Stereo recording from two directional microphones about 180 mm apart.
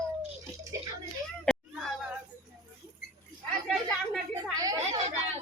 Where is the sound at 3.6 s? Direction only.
Centre (ahead or behind).